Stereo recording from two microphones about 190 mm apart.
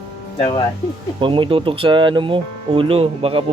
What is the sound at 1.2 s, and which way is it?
Speech, 25° right (ahead or behind).